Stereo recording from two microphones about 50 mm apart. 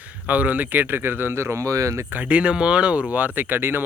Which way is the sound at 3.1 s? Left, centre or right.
Right.